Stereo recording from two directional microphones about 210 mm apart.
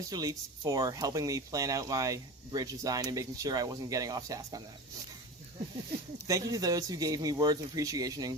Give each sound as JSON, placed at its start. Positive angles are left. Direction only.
{"t": 0.1, "sound": "speech", "side_deg": -15}
{"t": 6.2, "sound": "speech", "side_deg": -15}